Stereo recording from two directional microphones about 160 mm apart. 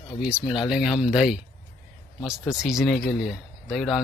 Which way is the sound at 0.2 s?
5° right (ahead or behind).